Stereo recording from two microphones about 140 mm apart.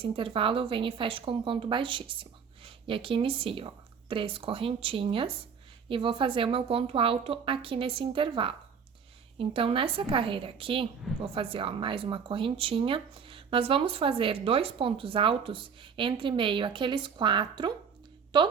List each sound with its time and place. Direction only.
0.0 s speech: 40° right (ahead or behind)